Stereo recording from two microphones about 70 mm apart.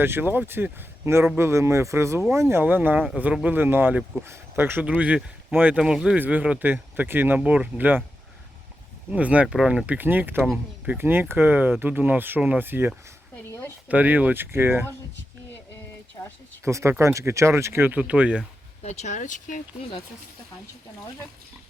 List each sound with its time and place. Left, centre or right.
0.0 s speech: right
2.6 s speech: right
5.8 s speech: centre
6.1 s speech: right
7.3 s speech: centre
9.1 s speech: centre
10.0 s speech: right
13.5 s a sound: left
13.8 s speech: right
14.5 s speech: right
16.6 s speech: right
17.9 s speech: centre